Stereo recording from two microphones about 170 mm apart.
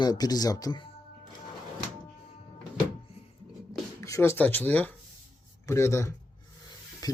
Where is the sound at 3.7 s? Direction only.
20° left (ahead or behind).